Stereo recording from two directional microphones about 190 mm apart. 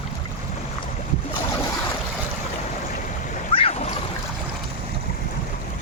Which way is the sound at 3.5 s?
30° left (ahead or behind).